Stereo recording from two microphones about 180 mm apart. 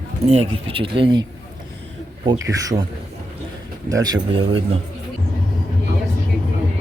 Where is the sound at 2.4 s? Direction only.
20° right (ahead or behind).